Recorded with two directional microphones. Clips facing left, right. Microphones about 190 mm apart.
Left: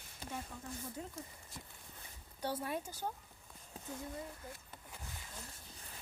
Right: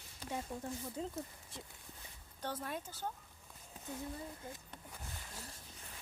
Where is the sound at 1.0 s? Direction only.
25° right (ahead or behind).